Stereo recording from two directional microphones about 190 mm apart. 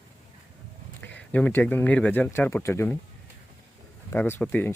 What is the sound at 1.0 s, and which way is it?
Speech, 10° left (ahead or behind).